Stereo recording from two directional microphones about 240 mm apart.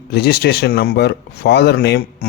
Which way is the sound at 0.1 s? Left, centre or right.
Left.